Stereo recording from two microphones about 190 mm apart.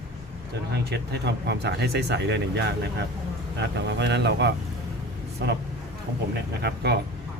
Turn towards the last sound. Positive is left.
turn(degrees=-60)  # may be behind; listen again after turning